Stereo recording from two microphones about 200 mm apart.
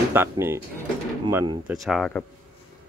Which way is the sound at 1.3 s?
25° right (ahead or behind).